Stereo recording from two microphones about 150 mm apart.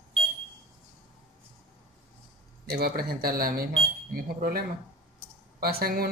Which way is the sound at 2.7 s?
90° right.